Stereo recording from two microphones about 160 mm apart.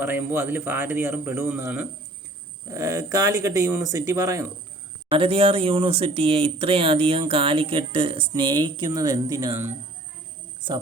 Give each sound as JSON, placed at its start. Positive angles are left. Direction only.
{"t": 0.0, "sound": "a man's voice", "side_deg": -15}
{"t": 5.1, "sound": "speech", "side_deg": -35}